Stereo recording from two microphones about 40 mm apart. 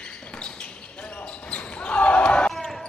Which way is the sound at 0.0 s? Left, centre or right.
Left.